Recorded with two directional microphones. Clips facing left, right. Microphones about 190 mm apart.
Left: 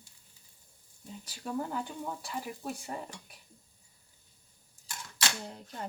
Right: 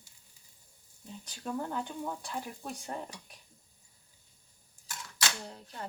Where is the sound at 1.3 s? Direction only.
5° left (ahead or behind).